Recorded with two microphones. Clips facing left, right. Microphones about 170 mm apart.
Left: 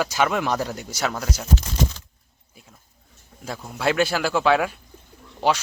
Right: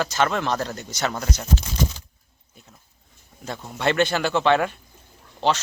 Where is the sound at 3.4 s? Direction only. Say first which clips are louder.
Even; centre (ahead or behind).